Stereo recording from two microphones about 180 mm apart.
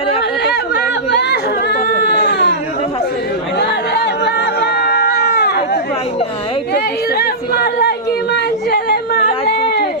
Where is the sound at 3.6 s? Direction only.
70° left (ahead or behind).